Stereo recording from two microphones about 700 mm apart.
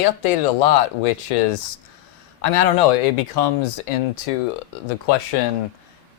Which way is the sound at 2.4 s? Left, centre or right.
Left.